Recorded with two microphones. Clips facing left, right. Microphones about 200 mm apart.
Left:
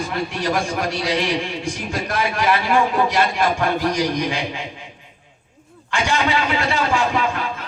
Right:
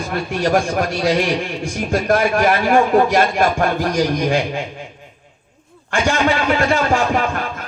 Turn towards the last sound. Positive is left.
turn(degrees=-50)  # may be behind; listen again after turning